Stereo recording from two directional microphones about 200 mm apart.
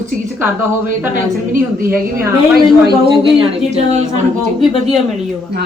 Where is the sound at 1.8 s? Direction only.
15° right (ahead or behind).